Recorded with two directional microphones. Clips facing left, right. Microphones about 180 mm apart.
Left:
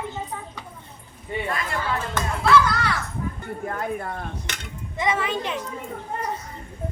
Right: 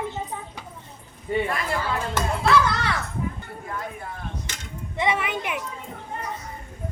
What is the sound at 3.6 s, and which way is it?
Speech, 60° left (ahead or behind).